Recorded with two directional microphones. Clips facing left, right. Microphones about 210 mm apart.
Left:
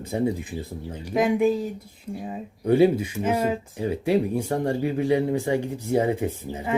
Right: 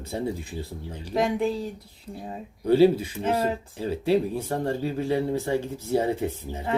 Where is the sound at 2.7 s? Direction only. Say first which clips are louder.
Even; 15° left (ahead or behind).